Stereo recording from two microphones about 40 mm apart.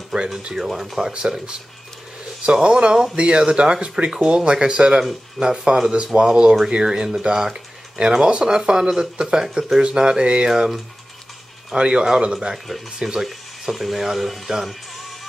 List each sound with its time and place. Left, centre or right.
0.6 s speech: centre
10.5 s speech: centre
11.7 s speech: right; by 14.8 s centre